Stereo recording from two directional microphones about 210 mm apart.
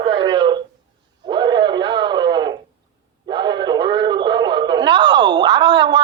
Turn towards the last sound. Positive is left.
turn(degrees=-20)  # may be behind; listen again after turning